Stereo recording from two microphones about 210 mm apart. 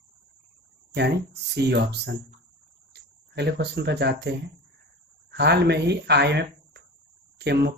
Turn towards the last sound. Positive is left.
turn(degrees=-55)  # may be behind; listen again after turning